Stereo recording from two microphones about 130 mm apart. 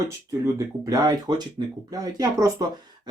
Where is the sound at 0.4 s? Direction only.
30° right (ahead or behind).